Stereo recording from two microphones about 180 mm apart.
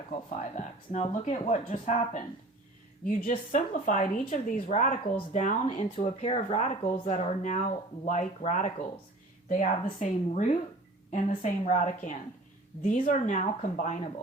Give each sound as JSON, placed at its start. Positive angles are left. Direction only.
{"t": 0.1, "sound": "speech", "side_deg": 45}
{"t": 3.2, "sound": "speech", "side_deg": 45}